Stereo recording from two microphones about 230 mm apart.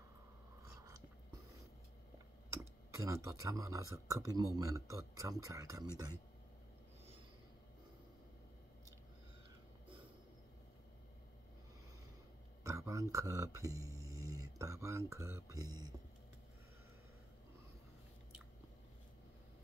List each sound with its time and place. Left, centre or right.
2.9 s speech: centre
12.6 s speech: centre